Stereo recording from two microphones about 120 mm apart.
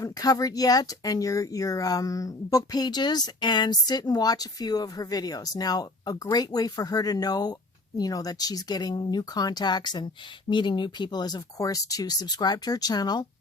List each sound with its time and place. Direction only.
0.0 s speech: 30° left (ahead or behind)